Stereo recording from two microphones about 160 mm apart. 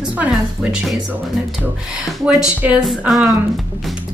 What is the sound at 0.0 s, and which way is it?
Speech, 5° right (ahead or behind).